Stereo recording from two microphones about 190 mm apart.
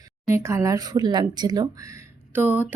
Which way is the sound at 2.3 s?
10° right (ahead or behind).